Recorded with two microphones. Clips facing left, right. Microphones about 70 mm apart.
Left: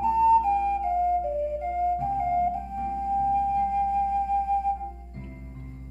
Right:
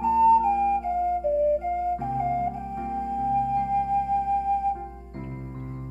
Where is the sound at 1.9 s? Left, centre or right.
Right.